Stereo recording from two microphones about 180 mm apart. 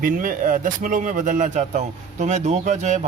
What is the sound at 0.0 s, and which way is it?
Speech, 50° right (ahead or behind).